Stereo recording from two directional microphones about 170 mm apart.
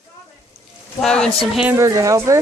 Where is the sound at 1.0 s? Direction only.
5° left (ahead or behind).